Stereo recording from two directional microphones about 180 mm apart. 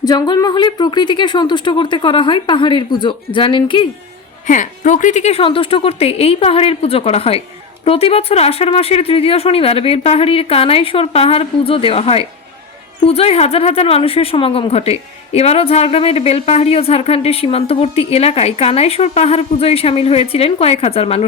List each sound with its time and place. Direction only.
0.0 s speech: 20° left (ahead or behind)
4.4 s speech: 45° left (ahead or behind)